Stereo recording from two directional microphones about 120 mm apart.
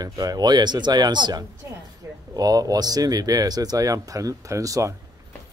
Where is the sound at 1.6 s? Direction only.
25° right (ahead or behind).